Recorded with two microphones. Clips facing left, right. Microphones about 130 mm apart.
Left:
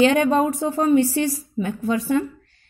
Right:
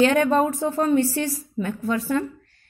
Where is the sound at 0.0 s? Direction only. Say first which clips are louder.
Left 1 dB; 20° left (ahead or behind).